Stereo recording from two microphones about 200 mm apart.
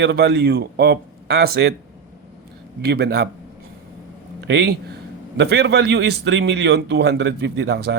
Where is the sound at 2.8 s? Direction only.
55° right (ahead or behind).